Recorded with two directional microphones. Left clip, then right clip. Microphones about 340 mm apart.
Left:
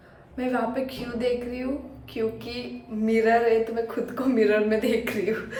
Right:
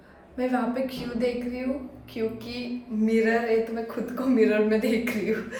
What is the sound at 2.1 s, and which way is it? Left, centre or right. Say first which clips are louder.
Speech: left 2 dB; centre.